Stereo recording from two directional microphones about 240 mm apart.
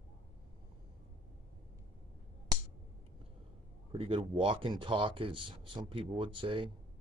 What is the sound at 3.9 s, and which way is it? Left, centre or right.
Speech, right.